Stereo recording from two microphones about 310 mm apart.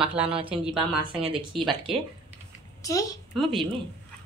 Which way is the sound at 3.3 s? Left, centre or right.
Centre.